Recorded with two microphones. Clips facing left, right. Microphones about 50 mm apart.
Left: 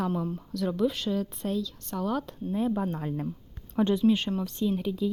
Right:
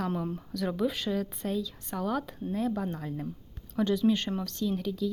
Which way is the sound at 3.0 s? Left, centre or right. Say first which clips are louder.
Left 4 dB; left.